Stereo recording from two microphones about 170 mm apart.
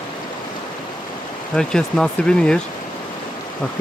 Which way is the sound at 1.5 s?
5° left (ahead or behind).